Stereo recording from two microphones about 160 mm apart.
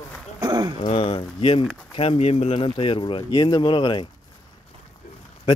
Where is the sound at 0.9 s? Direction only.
35° left (ahead or behind).